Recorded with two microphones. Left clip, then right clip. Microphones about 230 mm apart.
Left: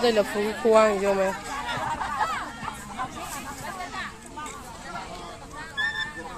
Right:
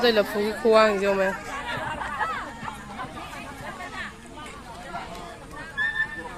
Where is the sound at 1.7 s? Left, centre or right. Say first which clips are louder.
Left 2 dB; left.